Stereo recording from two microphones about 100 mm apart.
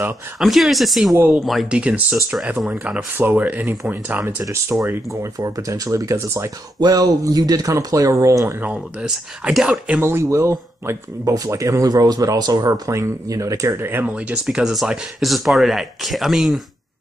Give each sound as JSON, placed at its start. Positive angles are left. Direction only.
{"t": 0.4, "sound": "speech", "side_deg": 0}
{"t": 1.1, "sound": "speech", "side_deg": -20}
{"t": 1.4, "sound": "speech", "side_deg": 0}
{"t": 1.8, "sound": "speech", "side_deg": -15}
{"t": 3.2, "sound": "speech", "side_deg": -15}
{"t": 5.4, "sound": "speech", "side_deg": -35}
{"t": 6.8, "sound": "speech", "side_deg": -40}
{"t": 8.5, "sound": "speech", "side_deg": -10}
{"t": 10.0, "sound": "speech", "side_deg": -25}